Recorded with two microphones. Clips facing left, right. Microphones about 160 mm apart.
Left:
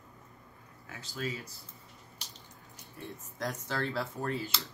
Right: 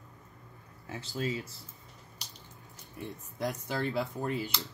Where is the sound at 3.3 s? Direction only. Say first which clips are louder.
Right 2 dB; 15° right (ahead or behind).